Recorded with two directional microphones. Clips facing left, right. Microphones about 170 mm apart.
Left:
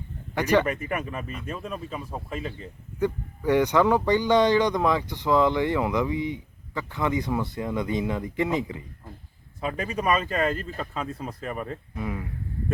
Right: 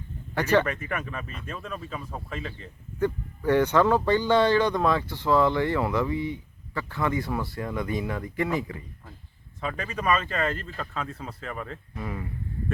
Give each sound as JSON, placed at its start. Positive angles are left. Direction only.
{"t": 0.3, "sound": "speech", "side_deg": 15}